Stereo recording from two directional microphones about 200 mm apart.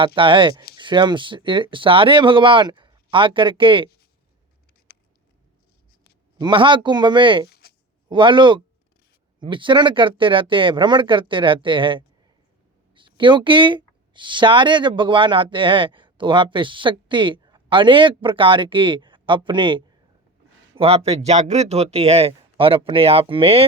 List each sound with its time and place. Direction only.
0.0 s speech: 25° right (ahead or behind)
6.4 s speech: 25° right (ahead or behind)